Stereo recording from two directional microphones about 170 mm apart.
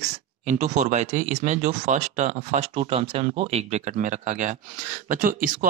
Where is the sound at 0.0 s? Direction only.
45° right (ahead or behind).